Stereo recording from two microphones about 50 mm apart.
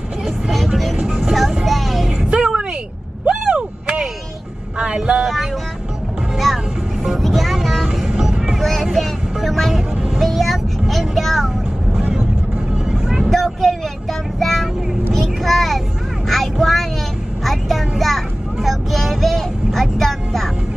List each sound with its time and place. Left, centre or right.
0.2 s vehicle: centre
2.2 s music: centre
3.3 s a sound: centre
5.2 s vehicle: centre
8.5 s vehicle: centre
12.9 s vehicle: centre